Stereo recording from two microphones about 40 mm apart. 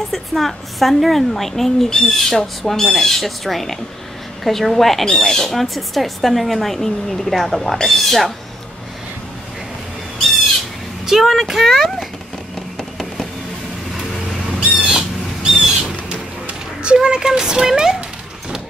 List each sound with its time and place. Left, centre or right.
0.1 s a woman's voice: centre
5.5 s a woman's voice: centre
11.1 s a woman's voice: centre
14.6 s squawk: centre
15.4 s a sound: centre